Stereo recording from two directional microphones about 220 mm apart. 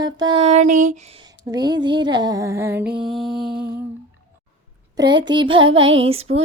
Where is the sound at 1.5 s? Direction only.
20° right (ahead or behind).